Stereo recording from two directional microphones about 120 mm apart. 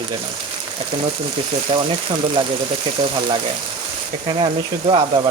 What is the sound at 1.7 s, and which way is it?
Sizzle, 45° right (ahead or behind).